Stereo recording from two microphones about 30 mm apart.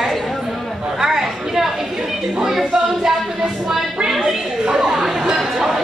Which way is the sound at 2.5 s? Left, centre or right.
Centre.